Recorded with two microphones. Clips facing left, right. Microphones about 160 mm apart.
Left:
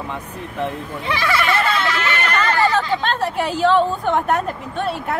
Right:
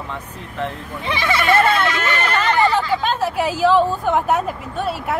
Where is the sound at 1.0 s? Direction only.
25° right (ahead or behind).